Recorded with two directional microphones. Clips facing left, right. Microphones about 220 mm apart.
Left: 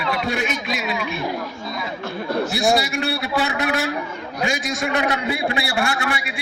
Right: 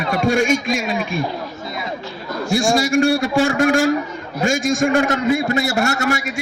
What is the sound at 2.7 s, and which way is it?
A man's voice, 45° right (ahead or behind).